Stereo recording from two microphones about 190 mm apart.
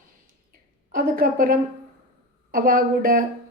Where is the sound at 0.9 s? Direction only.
50° right (ahead or behind).